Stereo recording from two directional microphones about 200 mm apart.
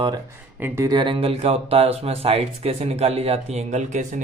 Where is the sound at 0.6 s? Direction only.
15° right (ahead or behind).